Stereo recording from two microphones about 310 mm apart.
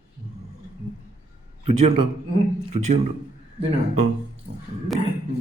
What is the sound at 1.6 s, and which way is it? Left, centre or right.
Speech, right.